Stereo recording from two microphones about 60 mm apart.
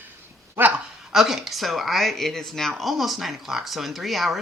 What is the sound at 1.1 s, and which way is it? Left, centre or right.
Speech, centre.